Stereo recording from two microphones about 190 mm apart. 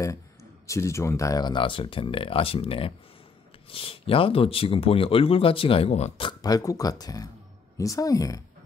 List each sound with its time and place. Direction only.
0.7 s speech: 15° left (ahead or behind)